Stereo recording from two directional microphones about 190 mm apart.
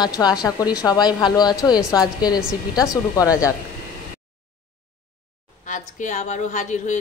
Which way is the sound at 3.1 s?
15° left (ahead or behind).